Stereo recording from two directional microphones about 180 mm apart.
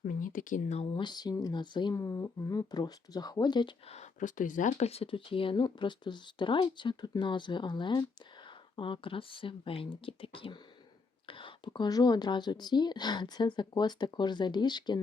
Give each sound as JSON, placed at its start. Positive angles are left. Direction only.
{"t": 0.0, "sound": "speech", "side_deg": 45}
{"t": 0.9, "sound": "speech", "side_deg": 25}